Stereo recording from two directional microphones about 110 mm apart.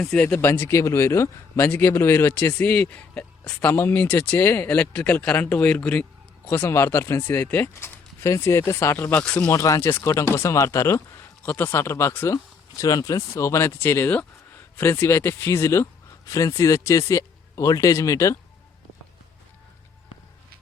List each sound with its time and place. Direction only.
0.2 s speech: 15° left (ahead or behind)
9.2 s speech: 10° left (ahead or behind)
9.5 s speech: 30° left (ahead or behind)
12.3 s speech: 30° left (ahead or behind)